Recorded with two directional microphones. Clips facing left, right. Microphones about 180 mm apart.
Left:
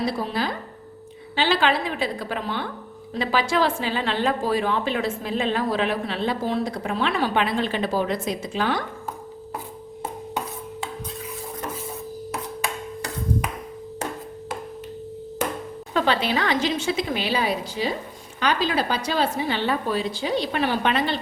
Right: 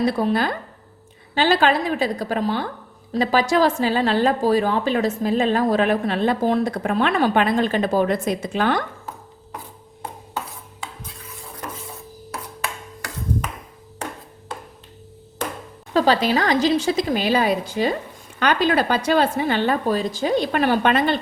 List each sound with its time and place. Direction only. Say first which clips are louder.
0.0 s a woman's voice: right 5 dB; 55° right (ahead or behind)
1.4 s a woman's voice: right 4 dB; 45° right (ahead or behind)
15.9 s a woman's voice: right 5 dB; 40° right (ahead or behind)